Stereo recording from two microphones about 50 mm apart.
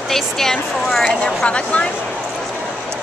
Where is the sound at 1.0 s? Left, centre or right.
Left.